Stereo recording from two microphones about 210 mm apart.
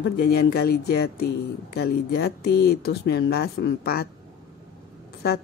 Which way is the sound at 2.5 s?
50° left (ahead or behind).